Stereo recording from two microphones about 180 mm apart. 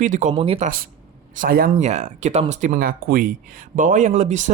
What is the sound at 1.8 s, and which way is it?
Speech, 40° right (ahead or behind).